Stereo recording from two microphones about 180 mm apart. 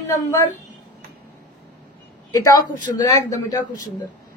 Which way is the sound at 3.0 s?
20° left (ahead or behind).